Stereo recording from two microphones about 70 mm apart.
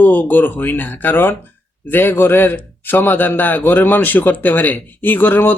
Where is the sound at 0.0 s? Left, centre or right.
Left.